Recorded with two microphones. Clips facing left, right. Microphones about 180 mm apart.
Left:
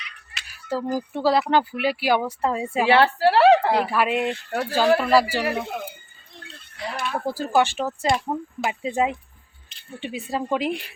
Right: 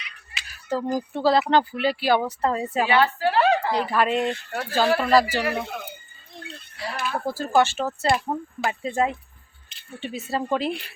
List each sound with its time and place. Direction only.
0.4 s a sound: 10° left (ahead or behind)
0.9 s speech: 10° left (ahead or behind)
2.9 s speech: 75° left (ahead or behind)
3.8 s speech: 10° left (ahead or behind)
6.9 s a sound: centre (ahead or behind)
7.3 s speech: 15° left (ahead or behind)
8.0 s speech: centre (ahead or behind)
8.8 s speech: 15° left (ahead or behind)